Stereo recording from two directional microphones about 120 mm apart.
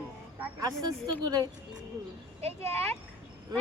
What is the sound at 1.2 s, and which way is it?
Speech, 35° right (ahead or behind).